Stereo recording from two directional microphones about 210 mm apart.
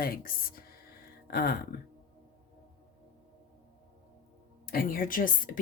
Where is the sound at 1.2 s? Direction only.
45° left (ahead or behind).